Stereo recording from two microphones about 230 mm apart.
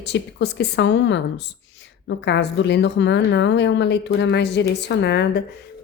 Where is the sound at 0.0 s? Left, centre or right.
Left.